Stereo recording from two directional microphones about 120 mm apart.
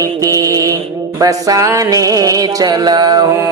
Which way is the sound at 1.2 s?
30° right (ahead or behind).